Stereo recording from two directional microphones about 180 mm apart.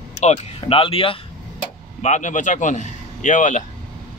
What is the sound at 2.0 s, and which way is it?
A man's voice, 40° left (ahead or behind).